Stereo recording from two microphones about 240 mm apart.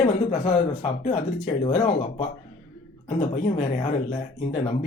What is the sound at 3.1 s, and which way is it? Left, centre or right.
Speech, left.